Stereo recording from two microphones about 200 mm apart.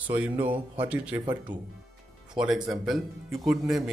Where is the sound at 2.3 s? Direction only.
Centre (ahead or behind).